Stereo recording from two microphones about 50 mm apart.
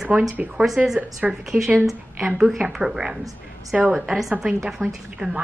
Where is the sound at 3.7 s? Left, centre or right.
Right; by 5.3 s centre.